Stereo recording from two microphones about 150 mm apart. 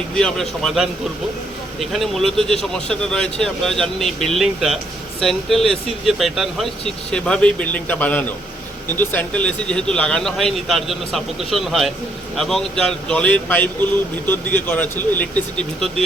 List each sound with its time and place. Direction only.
0.1 s speech: 5° left (ahead or behind)